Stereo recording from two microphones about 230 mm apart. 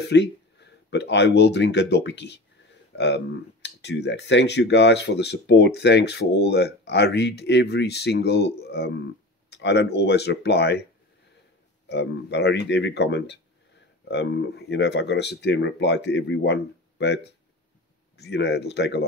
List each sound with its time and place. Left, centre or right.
0.1 s speech: left
11.9 s speech: left
18.1 s speech: left